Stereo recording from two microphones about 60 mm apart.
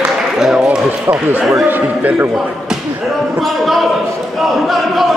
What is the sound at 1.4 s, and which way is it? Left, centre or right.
Speech, centre.